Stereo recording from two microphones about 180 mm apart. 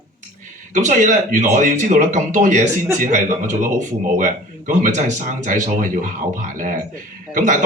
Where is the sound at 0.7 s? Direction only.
45° right (ahead or behind).